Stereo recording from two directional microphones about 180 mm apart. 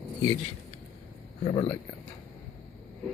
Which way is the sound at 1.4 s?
30° left (ahead or behind).